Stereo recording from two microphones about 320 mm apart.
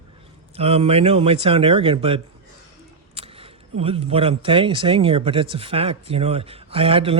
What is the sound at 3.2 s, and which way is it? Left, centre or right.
Single-lens reflex camera, centre.